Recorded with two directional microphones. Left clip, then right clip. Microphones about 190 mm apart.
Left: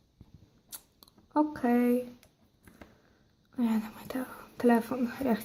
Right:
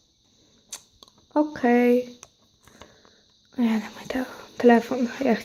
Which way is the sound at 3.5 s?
20° right (ahead or behind).